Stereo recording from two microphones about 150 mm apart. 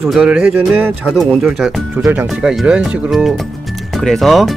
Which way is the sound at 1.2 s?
Centre (ahead or behind).